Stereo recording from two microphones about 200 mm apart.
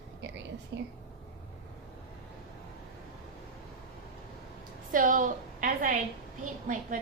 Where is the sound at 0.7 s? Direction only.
60° right (ahead or behind).